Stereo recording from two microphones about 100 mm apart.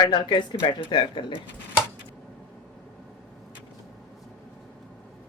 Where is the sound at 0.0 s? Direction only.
50° left (ahead or behind).